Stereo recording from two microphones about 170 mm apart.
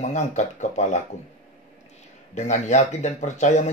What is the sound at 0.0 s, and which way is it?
Speech, 45° left (ahead or behind).